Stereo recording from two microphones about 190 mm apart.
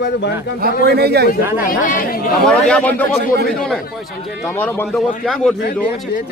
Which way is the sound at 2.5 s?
5° left (ahead or behind).